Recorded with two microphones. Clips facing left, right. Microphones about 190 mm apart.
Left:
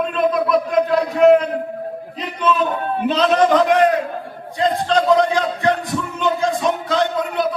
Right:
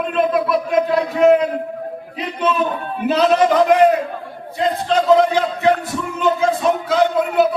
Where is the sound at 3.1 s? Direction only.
5° right (ahead or behind).